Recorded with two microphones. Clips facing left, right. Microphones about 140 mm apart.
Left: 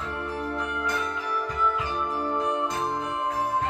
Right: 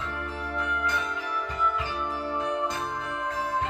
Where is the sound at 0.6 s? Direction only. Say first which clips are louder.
Left 1 dB; 50° left (ahead or behind).